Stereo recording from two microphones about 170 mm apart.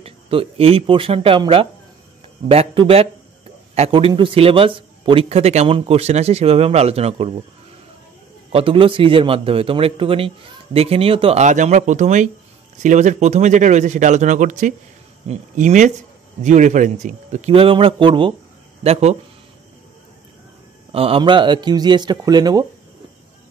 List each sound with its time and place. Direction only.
0.0 s a man's voice: 35° right (ahead or behind)
8.5 s a man's voice: 35° right (ahead or behind)
20.9 s speech: 35° right (ahead or behind)